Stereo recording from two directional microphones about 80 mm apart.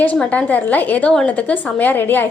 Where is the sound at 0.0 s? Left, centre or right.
Centre.